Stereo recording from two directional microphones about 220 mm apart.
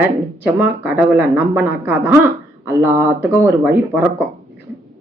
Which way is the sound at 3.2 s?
10° right (ahead or behind).